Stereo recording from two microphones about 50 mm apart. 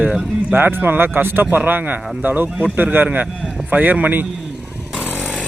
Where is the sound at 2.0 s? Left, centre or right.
Centre.